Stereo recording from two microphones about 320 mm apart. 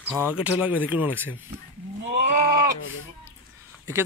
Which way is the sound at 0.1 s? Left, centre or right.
Centre.